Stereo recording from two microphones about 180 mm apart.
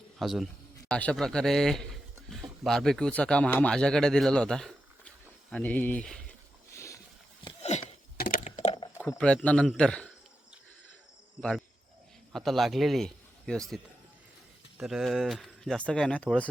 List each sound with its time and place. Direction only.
0.2 s speech: centre (ahead or behind)
6.7 s a sound: 15° left (ahead or behind)
7.6 s a sound: 40° left (ahead or behind)
9.0 s a man's voice: 5° left (ahead or behind)
11.3 s a man's voice: 5° left (ahead or behind)
14.8 s speech: centre (ahead or behind)